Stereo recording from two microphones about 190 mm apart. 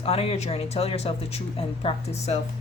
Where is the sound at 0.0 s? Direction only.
30° left (ahead or behind).